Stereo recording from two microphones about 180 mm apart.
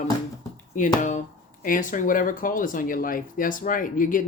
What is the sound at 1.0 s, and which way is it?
Speech, 45° left (ahead or behind).